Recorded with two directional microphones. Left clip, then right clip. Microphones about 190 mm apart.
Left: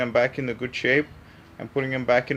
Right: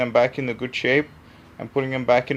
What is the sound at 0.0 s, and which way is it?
Speech, 15° right (ahead or behind).